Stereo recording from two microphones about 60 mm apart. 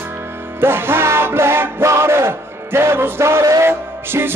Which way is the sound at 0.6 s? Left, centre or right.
Right.